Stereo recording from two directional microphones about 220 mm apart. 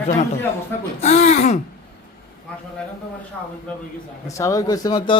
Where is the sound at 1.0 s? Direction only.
30° left (ahead or behind).